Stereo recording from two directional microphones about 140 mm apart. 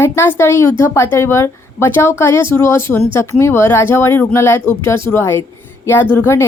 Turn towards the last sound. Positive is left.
turn(degrees=20)  # may be behind; listen again after turning